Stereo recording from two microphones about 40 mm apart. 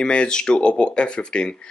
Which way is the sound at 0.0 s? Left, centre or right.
Left.